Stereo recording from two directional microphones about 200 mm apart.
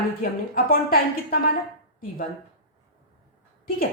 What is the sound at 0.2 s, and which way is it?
Speech, 45° left (ahead or behind).